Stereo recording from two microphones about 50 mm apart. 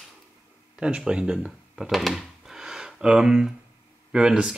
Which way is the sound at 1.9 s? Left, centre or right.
Centre.